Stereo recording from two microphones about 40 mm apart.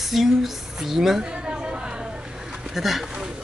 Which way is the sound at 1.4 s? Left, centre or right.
Right.